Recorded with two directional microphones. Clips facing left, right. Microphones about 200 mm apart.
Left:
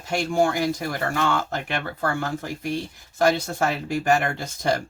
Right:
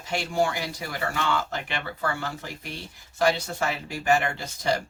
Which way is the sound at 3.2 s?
50° left (ahead or behind).